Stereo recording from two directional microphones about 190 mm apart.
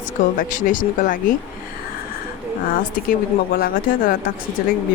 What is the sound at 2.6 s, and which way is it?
Speech, 45° left (ahead or behind).